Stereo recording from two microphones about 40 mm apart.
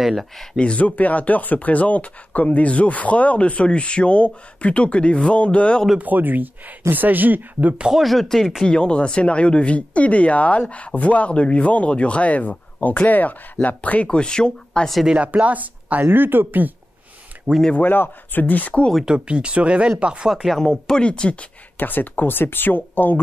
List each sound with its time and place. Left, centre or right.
0.0 s speech: centre
0.6 s speech: left
5.9 s speech: right
7.9 s speech: centre
8.6 s speech: left
14.0 s speech: left
15.2 s speech: right
16.0 s speech: right
17.5 s speech: right
17.8 s speech: left
19.1 s speech: right
20.5 s speech: centre; by 21.5 s left
21.7 s speech: left